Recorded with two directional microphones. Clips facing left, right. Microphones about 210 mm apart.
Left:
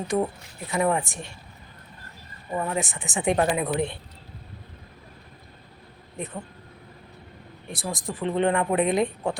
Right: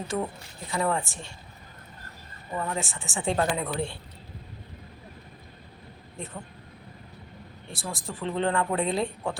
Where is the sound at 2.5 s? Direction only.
20° left (ahead or behind).